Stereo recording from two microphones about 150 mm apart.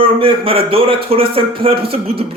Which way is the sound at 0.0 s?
35° right (ahead or behind).